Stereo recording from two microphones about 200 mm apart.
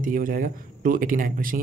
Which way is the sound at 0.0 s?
45° right (ahead or behind).